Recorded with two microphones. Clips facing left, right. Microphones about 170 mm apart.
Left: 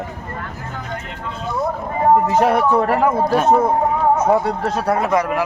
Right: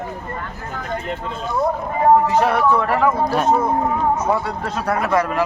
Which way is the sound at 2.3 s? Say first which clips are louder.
Left 2 dB; 15° left (ahead or behind).